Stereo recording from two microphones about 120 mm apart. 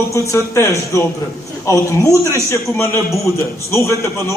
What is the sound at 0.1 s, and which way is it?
Speech, 25° left (ahead or behind).